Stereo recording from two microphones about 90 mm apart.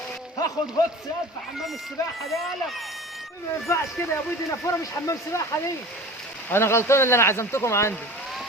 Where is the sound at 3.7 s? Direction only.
30° left (ahead or behind).